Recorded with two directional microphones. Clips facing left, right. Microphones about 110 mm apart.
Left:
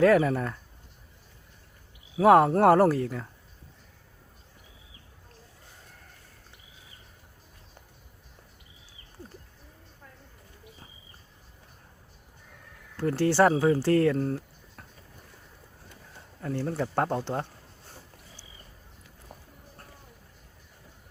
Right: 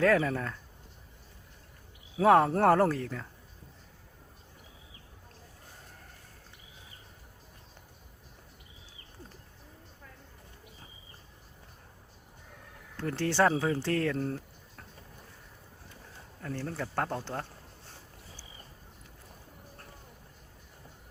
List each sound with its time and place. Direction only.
0.0 s speech: 10° left (ahead or behind)
2.1 s speech: 10° left (ahead or behind)
13.0 s speech: 5° left (ahead or behind)
16.4 s speech: 10° left (ahead or behind)